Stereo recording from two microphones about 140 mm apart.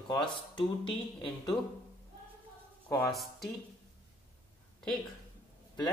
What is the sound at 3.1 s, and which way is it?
Speech, centre (ahead or behind).